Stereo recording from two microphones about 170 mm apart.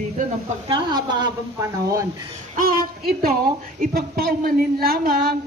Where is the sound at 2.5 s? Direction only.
60° right (ahead or behind).